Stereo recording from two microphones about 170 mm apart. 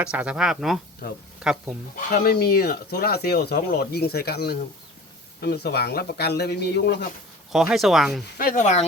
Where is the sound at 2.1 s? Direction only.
65° left (ahead or behind).